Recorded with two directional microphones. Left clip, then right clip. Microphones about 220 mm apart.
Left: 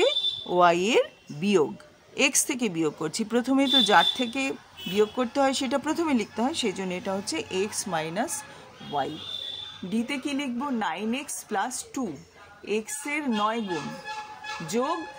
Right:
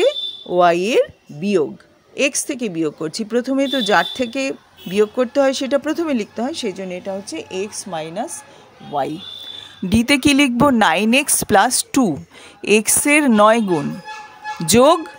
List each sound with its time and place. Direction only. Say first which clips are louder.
0.0 s speech: right 6 dB; 10° right (ahead or behind)
8.9 s speech: right 7 dB; 20° right (ahead or behind)
9.8 s speech: right 16 dB; 45° right (ahead or behind)
14.7 s speech: right 16 dB; 45° right (ahead or behind)